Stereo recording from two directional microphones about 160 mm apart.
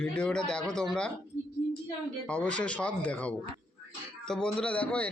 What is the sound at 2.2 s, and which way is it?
A man's voice, 10° left (ahead or behind).